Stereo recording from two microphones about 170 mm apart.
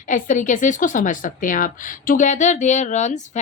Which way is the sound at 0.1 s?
45° left (ahead or behind).